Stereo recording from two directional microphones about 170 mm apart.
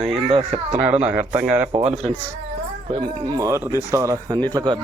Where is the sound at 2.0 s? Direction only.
5° left (ahead or behind).